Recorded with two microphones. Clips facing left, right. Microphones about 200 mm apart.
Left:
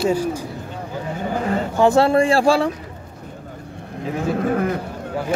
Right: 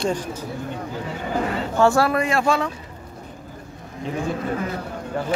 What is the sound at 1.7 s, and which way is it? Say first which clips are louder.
Speech: left 3 dB; 20° left (ahead or behind).